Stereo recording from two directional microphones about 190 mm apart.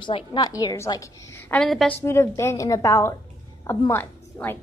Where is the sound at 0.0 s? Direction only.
25° left (ahead or behind); by 2.0 s 5° left (ahead or behind).